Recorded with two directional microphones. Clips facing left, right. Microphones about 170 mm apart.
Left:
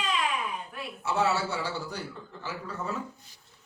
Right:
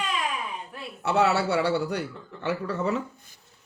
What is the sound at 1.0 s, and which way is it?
A man's voice, 65° right (ahead or behind).